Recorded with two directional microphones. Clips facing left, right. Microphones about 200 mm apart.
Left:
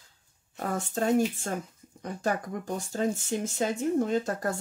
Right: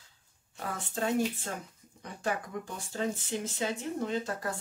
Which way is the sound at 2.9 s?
45° left (ahead or behind).